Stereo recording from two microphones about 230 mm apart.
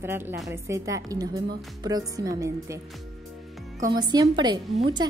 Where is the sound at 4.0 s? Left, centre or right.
Centre.